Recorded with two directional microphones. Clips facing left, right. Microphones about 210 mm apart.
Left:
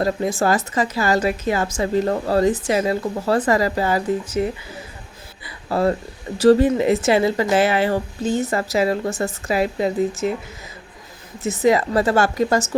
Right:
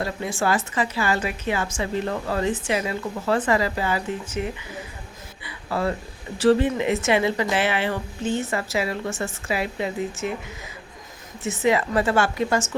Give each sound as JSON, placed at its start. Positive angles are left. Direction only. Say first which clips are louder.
{"t": 0.0, "sound": "speech", "louder": "left 6 dB", "side_deg": 40}
{"t": 11.4, "sound": "speech", "louder": "left 4 dB", "side_deg": 35}